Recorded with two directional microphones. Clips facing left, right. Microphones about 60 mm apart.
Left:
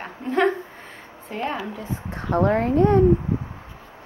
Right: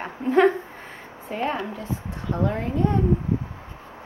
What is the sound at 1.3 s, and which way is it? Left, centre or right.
Speech, centre.